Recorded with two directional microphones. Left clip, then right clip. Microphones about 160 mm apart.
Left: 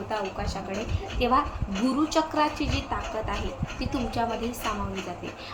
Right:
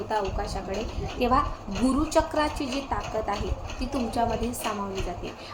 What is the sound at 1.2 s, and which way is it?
Speech, 15° right (ahead or behind).